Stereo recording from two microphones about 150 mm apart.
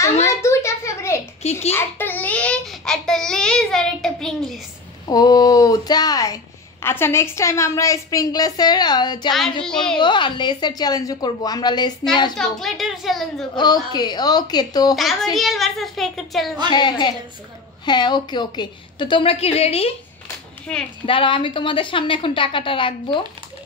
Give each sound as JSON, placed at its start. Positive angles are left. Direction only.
{"t": 0.3, "sound": "a sound", "side_deg": 20}
{"t": 1.4, "sound": "a child's voice", "side_deg": 45}
{"t": 1.7, "sound": "a child's voice", "side_deg": 15}
{"t": 5.0, "sound": "speech", "side_deg": 25}
{"t": 12.4, "sound": "a child's voice", "side_deg": 0}
{"t": 13.6, "sound": "speech", "side_deg": 25}
{"t": 15.3, "sound": "a child's voice", "side_deg": 0}
{"t": 16.7, "sound": "a woman's voice", "side_deg": 30}
{"t": 20.7, "sound": "a child's voice", "side_deg": 5}
{"t": 21.0, "sound": "a woman's voice", "side_deg": 35}